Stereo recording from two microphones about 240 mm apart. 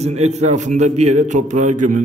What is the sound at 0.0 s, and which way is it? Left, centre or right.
Speech, right.